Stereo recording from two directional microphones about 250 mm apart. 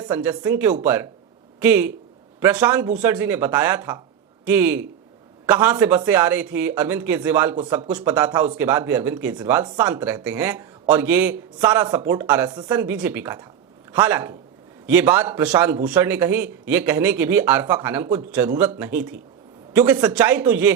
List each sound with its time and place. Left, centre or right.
0.0 s a man's voice: centre